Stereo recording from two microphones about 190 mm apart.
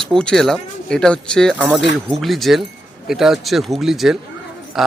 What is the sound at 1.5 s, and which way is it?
Speech, 5° right (ahead or behind).